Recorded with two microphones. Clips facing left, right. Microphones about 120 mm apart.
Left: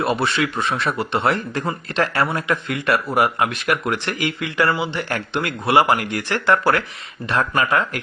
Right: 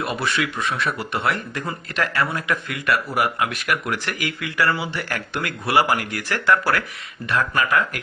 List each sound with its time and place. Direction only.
0.0 s speech: 30° left (ahead or behind)